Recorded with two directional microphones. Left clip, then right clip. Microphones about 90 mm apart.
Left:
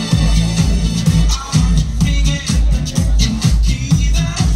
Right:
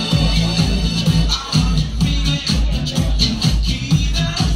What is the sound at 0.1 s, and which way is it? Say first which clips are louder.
Music: right 1 dB; 40° left (ahead or behind).